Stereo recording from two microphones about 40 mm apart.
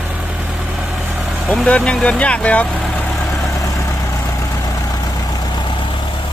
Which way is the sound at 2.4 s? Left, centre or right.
Left.